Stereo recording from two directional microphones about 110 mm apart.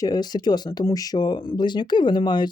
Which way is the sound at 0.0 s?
40° left (ahead or behind).